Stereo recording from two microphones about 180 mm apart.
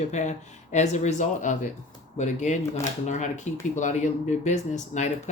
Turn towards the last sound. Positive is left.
turn(degrees=40)  # may be behind; listen again after turning